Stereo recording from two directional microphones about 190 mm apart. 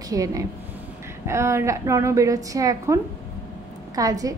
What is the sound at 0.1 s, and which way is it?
A woman's voice, 15° right (ahead or behind).